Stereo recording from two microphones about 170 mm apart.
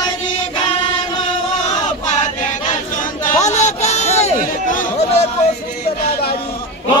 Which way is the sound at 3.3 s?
45° left (ahead or behind).